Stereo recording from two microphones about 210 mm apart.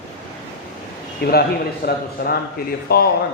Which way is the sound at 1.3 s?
50° left (ahead or behind).